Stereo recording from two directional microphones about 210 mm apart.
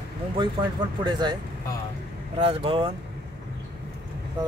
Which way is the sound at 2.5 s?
25° right (ahead or behind).